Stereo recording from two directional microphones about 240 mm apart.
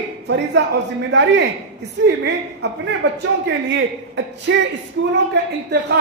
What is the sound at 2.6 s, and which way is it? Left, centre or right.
Speech, right.